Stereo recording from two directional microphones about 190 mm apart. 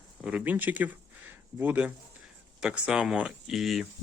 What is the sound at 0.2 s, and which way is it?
Speech, 5° right (ahead or behind).